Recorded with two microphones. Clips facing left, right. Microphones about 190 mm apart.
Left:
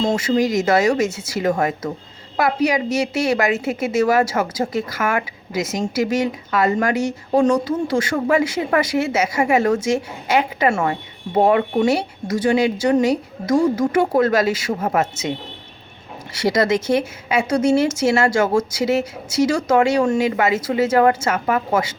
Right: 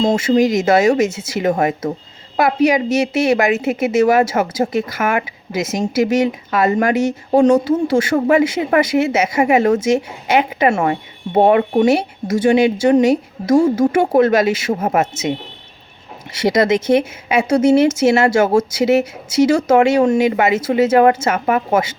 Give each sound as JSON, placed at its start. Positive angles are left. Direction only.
{"t": 0.2, "sound": "a woman's voice", "side_deg": -25}
{"t": 16.3, "sound": "a woman's voice", "side_deg": -20}